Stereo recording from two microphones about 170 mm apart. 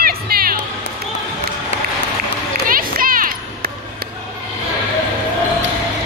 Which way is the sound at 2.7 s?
55° right (ahead or behind).